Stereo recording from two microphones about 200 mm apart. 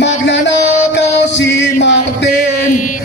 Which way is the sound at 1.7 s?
60° left (ahead or behind).